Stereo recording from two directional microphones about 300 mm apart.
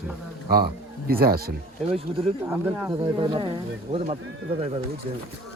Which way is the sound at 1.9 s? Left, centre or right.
Centre.